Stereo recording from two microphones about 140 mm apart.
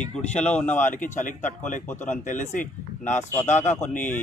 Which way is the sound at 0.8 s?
65° left (ahead or behind).